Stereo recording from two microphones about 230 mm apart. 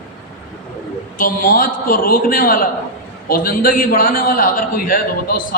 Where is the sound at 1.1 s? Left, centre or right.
Left.